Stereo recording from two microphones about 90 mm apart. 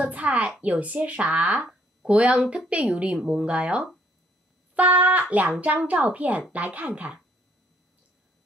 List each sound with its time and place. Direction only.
0.0 s speech: 15° right (ahead or behind)